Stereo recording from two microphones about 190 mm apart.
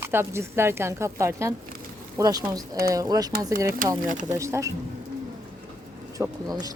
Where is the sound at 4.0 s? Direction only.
40° right (ahead or behind).